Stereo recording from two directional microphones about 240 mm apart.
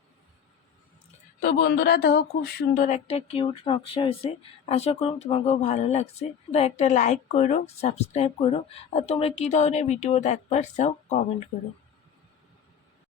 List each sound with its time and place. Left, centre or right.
1.4 s speech: left